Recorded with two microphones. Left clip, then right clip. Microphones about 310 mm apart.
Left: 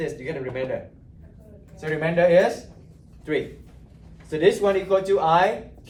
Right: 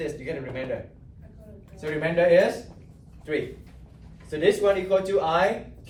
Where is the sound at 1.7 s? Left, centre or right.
Left.